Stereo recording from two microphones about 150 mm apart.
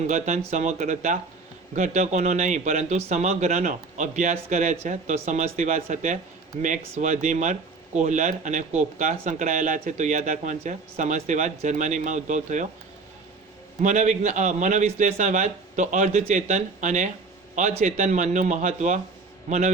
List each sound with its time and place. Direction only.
0.1 s a man's voice: 50° right (ahead or behind)
13.8 s a man's voice: 55° right (ahead or behind)